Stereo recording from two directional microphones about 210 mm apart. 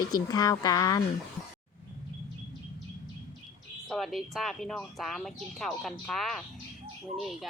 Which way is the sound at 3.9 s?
Centre (ahead or behind).